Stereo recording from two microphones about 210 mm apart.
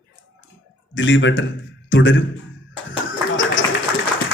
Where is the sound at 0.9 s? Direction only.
60° left (ahead or behind).